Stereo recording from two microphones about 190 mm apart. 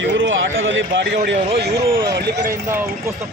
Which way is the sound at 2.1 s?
60° right (ahead or behind).